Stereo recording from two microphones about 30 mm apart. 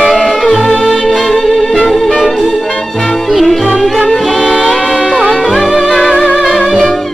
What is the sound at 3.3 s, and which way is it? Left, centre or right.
Music, centre.